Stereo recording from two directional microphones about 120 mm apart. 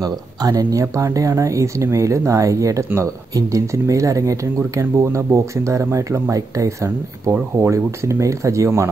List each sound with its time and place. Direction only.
0.0 s speech: 30° right (ahead or behind)